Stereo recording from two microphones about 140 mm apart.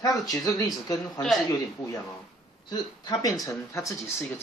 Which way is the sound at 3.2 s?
25° left (ahead or behind).